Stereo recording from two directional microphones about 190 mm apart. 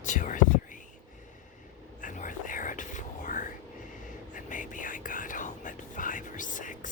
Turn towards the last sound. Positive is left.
turn(degrees=45)  # may be behind; listen again after turning